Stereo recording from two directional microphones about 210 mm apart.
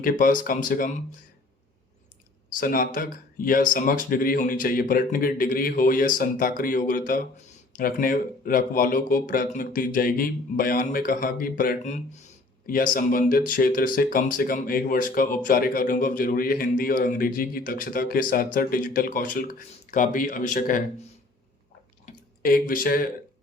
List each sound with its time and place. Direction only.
0.0 s speech: 40° left (ahead or behind)
2.6 s speech: 45° left (ahead or behind)
22.0 s a sound: 45° left (ahead or behind)